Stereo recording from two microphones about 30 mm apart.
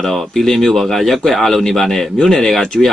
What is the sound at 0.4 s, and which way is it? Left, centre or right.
Speech, centre.